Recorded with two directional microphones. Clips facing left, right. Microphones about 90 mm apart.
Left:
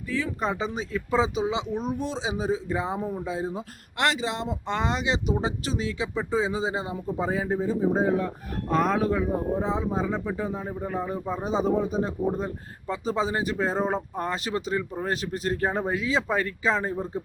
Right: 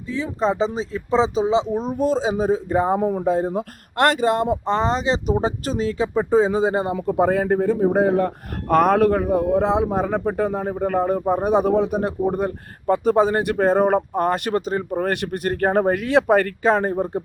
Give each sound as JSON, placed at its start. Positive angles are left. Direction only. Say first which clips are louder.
{"t": 0.1, "sound": "speech", "louder": "right 6 dB", "side_deg": -25}
{"t": 3.0, "sound": "speech", "louder": "right 10 dB", "side_deg": -65}
{"t": 4.7, "sound": "speech", "louder": "right 4 dB", "side_deg": -35}
{"t": 6.9, "sound": "a man's voice", "louder": "right 9 dB", "side_deg": -65}
{"t": 12.9, "sound": "a man's voice", "louder": "right 10 dB", "side_deg": -55}
{"t": 15.0, "sound": "a man's voice", "louder": "right 5 dB", "side_deg": -60}